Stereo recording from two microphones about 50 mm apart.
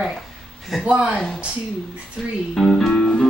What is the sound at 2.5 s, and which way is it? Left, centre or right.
Speech, centre.